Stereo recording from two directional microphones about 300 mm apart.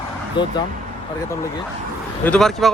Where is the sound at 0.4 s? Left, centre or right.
Centre.